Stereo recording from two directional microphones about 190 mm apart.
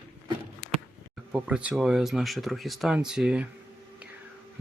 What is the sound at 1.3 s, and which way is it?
Speech, 5° right (ahead or behind).